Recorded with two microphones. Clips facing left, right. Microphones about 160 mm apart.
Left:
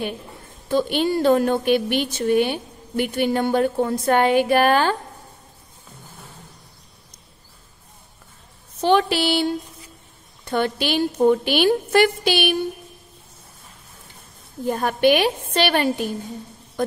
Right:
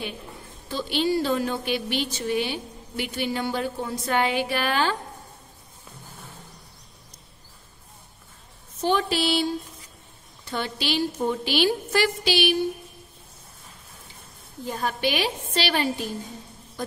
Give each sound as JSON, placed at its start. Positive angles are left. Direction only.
{"t": 0.7, "sound": "speech", "side_deg": 55}
{"t": 8.8, "sound": "a woman's voice", "side_deg": 70}
{"t": 14.7, "sound": "a woman's voice", "side_deg": 55}